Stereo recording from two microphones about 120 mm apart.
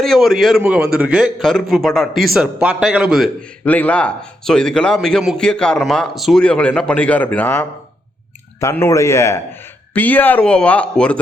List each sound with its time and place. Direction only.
0.0 s a man's voice: centre (ahead or behind)
3.6 s a man's voice: 15° left (ahead or behind)
8.7 s a man's voice: 20° left (ahead or behind)